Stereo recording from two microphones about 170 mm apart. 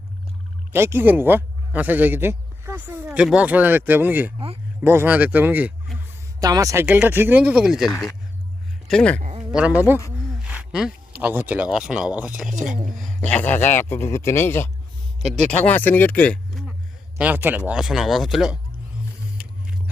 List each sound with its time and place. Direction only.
0.7 s speech: 15° right (ahead or behind)
8.9 s speech: 5° left (ahead or behind)
9.4 s a sound: 5° right (ahead or behind)
11.2 s speech: 10° right (ahead or behind)
13.0 s a man's voice: 5° left (ahead or behind)
15.2 s a man's voice: centre (ahead or behind)
17.2 s speech: 10° right (ahead or behind)